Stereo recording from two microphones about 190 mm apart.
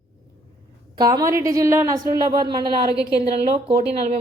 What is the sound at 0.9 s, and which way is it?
A woman's voice, 20° right (ahead or behind).